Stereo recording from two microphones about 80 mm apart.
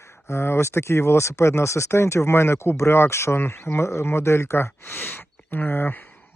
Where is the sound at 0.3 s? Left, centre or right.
Left.